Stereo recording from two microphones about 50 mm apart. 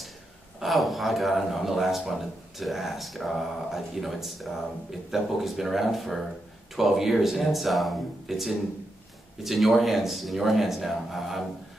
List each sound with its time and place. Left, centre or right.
0.6 s speech: centre